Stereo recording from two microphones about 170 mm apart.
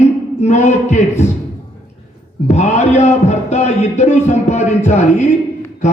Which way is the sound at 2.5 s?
40° left (ahead or behind).